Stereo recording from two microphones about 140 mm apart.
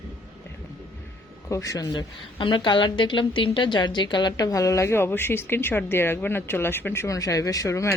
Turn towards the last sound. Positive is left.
turn(degrees=20)  # may be behind; listen again after turning